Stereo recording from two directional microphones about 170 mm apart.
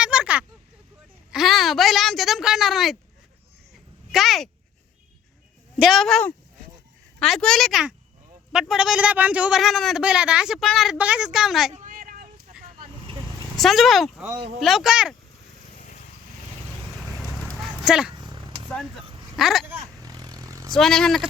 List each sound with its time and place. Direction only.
0.0 s a sound: 5° right (ahead or behind)
1.3 s a woman's voice: centre (ahead or behind)
4.1 s speech: centre (ahead or behind)
5.7 s speech: centre (ahead or behind)
11.7 s vehicle: 50° right (ahead or behind)
13.6 s speech: centre (ahead or behind)
17.0 s horse: centre (ahead or behind)
17.6 s dog: 5° right (ahead or behind)
18.1 s a sound: 25° right (ahead or behind)
18.7 s speech: centre (ahead or behind)
19.0 s a sound: 30° right (ahead or behind)
19.4 s speech: centre (ahead or behind)
19.6 s vehicle: 15° right (ahead or behind)
20.7 s speech: 5° left (ahead or behind)